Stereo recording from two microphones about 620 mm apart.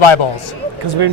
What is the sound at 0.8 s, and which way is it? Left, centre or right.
Speech, right.